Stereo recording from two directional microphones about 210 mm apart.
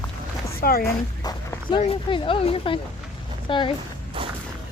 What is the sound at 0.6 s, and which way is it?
Speech, 45° left (ahead or behind).